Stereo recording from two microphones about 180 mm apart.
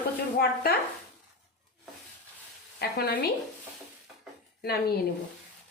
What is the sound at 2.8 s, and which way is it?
Speech, 60° left (ahead or behind).